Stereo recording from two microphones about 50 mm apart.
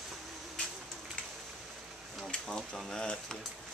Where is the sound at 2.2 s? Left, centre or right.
Centre.